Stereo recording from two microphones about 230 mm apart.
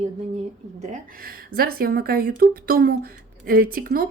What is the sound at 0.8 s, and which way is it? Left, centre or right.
Speech, right.